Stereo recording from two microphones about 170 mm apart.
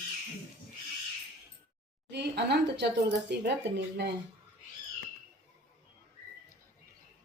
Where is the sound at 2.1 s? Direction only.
75° right (ahead or behind).